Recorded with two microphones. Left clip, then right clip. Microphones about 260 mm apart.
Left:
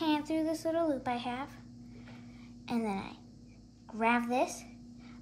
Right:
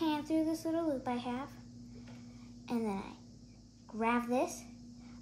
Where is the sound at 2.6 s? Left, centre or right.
Left.